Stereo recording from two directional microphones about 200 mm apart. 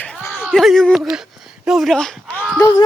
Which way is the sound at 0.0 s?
10° left (ahead or behind).